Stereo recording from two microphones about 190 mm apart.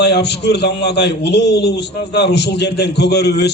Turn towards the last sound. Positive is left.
turn(degrees=60)  # may be behind; listen again after turning